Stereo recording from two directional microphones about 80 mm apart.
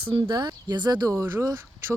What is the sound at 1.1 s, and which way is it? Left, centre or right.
Speech, right.